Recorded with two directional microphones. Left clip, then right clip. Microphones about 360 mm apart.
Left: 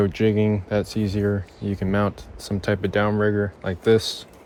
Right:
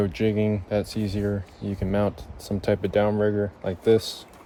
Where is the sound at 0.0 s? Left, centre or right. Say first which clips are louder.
Left 3 dB; left.